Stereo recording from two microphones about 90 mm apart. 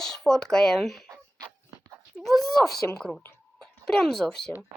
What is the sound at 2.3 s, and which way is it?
A woman's voice, 5° left (ahead or behind).